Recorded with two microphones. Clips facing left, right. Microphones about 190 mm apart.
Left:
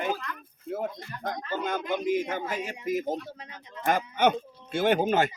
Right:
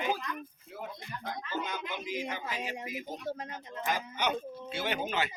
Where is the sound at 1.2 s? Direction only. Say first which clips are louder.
Left 6 dB; 45° left (ahead or behind).